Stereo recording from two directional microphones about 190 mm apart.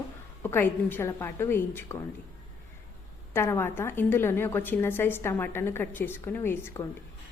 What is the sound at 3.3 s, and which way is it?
A woman's voice, 15° left (ahead or behind).